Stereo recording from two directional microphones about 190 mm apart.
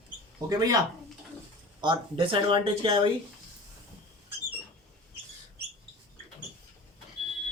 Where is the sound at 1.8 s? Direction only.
25° right (ahead or behind).